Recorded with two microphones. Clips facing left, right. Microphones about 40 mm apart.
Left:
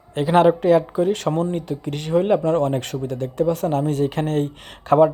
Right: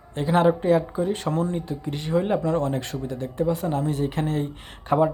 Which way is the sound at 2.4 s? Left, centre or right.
Left.